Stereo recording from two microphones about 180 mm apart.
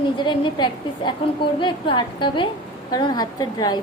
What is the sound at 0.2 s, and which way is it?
A woman's voice, 25° left (ahead or behind).